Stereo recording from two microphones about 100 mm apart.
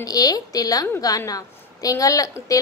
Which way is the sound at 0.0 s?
40° left (ahead or behind).